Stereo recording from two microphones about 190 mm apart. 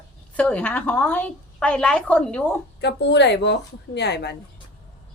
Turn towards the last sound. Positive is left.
turn(degrees=60)  # may be behind; listen again after turning